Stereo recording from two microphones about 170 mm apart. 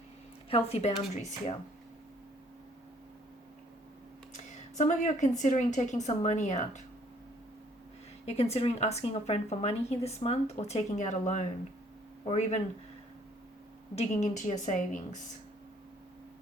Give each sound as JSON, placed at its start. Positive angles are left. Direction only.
{"t": 0.5, "sound": "speech", "side_deg": 40}
{"t": 4.4, "sound": "a woman's voice", "side_deg": 45}
{"t": 8.2, "sound": "speech", "side_deg": 40}
{"t": 13.9, "sound": "a woman's voice", "side_deg": 40}